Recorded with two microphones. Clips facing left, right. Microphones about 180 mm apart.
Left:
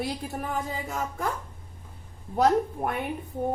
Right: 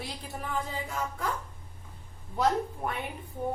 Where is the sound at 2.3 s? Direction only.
50° left (ahead or behind).